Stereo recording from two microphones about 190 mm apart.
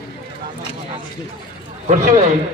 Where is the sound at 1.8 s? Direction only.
40° right (ahead or behind).